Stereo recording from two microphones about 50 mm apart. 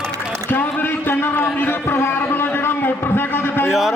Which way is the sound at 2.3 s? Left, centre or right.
Left.